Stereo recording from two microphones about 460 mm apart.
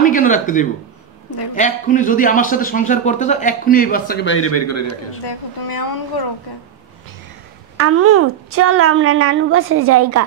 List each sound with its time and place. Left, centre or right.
0.0 s a man's voice: centre
5.2 s a woman's voice: left
7.7 s a woman's voice: right